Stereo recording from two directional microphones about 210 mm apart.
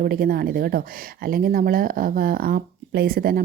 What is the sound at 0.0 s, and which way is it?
A woman's voice, 45° right (ahead or behind).